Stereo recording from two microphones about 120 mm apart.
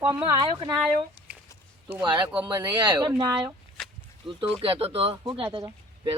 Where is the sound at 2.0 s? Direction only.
40° right (ahead or behind).